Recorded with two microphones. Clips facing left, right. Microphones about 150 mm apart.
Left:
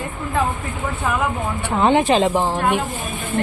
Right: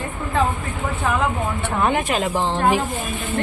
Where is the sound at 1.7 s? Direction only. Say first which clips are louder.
Left 6 dB; 25° left (ahead or behind).